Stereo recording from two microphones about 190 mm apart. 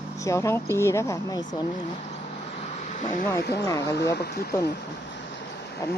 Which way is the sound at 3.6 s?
15° left (ahead or behind).